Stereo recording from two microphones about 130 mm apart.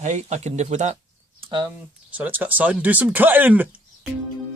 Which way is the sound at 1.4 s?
35° right (ahead or behind).